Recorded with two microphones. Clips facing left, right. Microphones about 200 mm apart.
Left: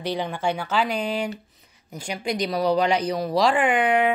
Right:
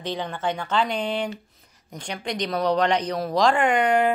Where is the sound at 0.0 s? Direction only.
10° left (ahead or behind).